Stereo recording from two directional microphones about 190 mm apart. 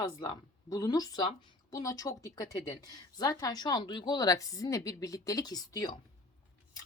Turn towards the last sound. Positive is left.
turn(degrees=20)  # may be behind; listen again after turning